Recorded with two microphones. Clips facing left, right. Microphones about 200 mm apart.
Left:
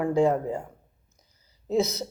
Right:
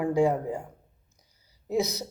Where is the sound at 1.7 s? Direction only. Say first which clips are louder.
Left 3 dB; 15° right (ahead or behind).